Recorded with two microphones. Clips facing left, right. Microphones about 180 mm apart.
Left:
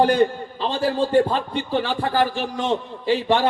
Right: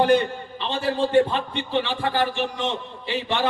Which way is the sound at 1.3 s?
40° left (ahead or behind).